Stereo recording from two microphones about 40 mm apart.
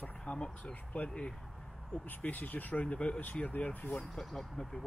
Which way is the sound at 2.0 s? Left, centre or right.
Left.